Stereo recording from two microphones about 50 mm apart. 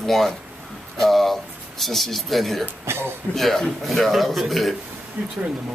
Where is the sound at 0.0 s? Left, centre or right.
Centre.